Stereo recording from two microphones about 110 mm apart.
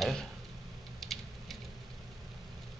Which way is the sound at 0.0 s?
5° left (ahead or behind).